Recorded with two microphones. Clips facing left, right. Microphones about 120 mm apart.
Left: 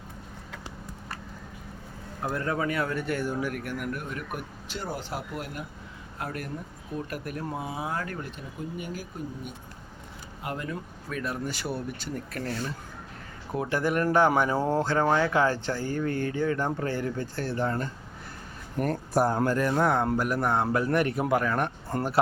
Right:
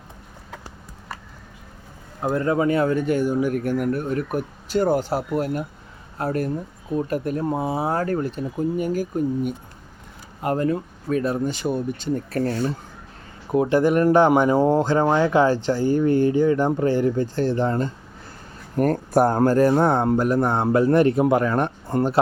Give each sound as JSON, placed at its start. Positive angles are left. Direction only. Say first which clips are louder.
{"t": 2.2, "sound": "speech", "louder": "right 8 dB", "side_deg": -25}
{"t": 3.5, "sound": "speech", "louder": "right 10 dB", "side_deg": -30}
{"t": 4.8, "sound": "speech", "louder": "right 14 dB", "side_deg": -50}
{"t": 12.1, "sound": "speech", "louder": "right 10 dB", "side_deg": -35}
{"t": 13.5, "sound": "speech", "louder": "right 9 dB", "side_deg": -20}
{"t": 18.8, "sound": "speech", "louder": "right 7 dB", "side_deg": -50}